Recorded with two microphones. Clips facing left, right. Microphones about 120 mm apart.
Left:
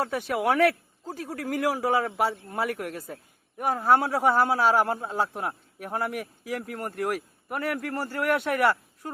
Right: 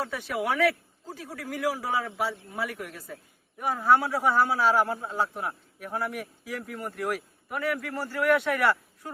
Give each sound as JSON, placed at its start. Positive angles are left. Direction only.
{"t": 0.3, "sound": "a man's voice", "side_deg": 55}